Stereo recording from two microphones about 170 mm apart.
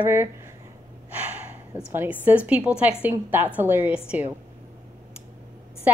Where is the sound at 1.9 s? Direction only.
10° right (ahead or behind).